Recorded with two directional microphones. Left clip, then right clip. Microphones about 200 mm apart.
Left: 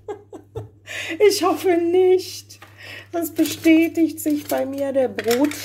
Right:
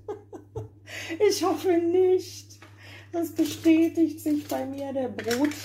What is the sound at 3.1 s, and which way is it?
Speech, 25° left (ahead or behind).